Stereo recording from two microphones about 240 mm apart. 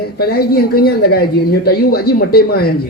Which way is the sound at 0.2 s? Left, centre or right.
Left.